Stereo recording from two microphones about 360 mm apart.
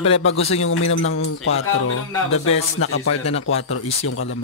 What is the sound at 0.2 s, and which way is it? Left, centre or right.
Speech, left.